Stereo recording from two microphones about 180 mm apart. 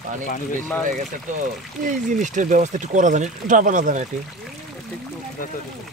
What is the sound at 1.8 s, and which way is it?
Speech, 45° right (ahead or behind).